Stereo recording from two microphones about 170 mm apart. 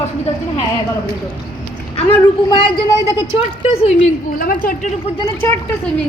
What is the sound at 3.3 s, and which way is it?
Speech, 35° left (ahead or behind).